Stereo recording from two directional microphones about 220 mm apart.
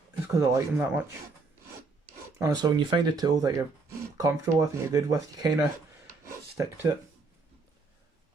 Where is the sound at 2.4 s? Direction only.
15° right (ahead or behind).